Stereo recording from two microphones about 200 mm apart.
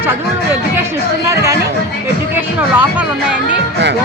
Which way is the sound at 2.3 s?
10° right (ahead or behind).